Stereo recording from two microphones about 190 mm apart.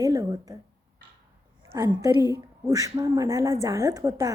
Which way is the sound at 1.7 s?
20° right (ahead or behind).